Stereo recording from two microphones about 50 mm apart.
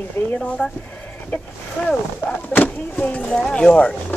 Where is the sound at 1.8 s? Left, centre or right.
Centre.